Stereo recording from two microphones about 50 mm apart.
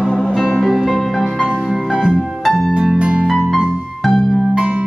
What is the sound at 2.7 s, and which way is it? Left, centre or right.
Harp, centre.